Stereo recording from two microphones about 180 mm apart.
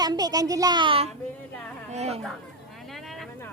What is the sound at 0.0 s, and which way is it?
A child's voice, 20° right (ahead or behind).